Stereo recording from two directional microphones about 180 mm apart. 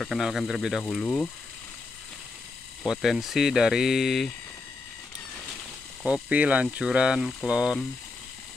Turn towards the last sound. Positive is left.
turn(degrees=-5)  # may be behind; listen again after turning